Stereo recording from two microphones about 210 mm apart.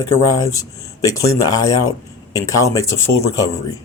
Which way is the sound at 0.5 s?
15° left (ahead or behind).